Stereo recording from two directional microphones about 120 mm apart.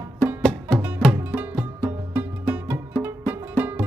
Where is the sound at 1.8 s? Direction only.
15° right (ahead or behind).